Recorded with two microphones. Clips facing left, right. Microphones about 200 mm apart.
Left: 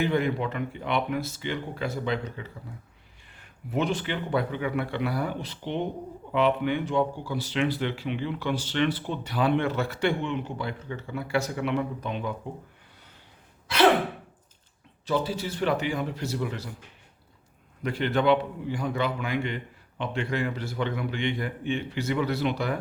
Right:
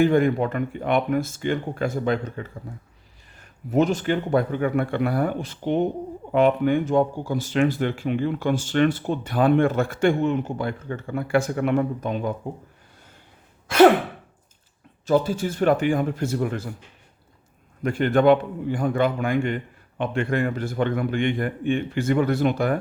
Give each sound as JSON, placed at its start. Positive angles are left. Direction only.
{"t": 0.0, "sound": "speech", "side_deg": -50}
{"t": 15.0, "sound": "speech", "side_deg": -45}
{"t": 17.8, "sound": "speech", "side_deg": -50}